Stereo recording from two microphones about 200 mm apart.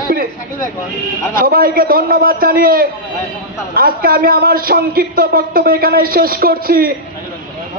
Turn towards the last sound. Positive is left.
turn(degrees=-50)  # may be behind; listen again after turning